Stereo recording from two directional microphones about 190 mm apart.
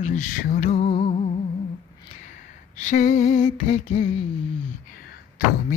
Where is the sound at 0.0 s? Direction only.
45° left (ahead or behind).